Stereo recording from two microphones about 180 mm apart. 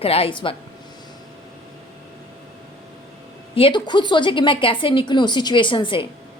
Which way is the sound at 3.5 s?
30° left (ahead or behind).